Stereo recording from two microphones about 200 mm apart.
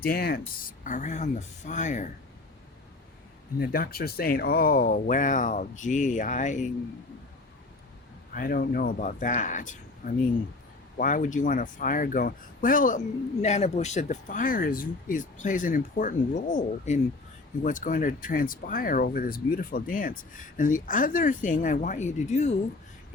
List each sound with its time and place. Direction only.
0.0 s speech: 50° left (ahead or behind)
3.6 s speech: 50° left (ahead or behind)
8.3 s speech: 45° left (ahead or behind)